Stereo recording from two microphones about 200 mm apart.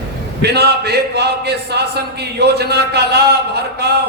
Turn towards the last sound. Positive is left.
turn(degrees=-55)  # may be behind; listen again after turning